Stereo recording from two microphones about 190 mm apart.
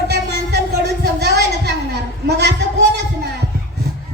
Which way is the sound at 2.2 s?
65° right (ahead or behind).